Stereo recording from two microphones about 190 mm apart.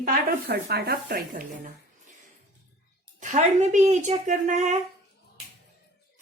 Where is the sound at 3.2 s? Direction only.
40° right (ahead or behind).